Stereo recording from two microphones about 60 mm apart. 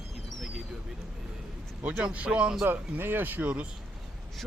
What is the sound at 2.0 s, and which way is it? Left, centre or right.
Speech, right.